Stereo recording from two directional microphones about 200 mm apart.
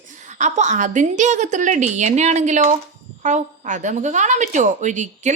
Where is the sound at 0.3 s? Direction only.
35° right (ahead or behind).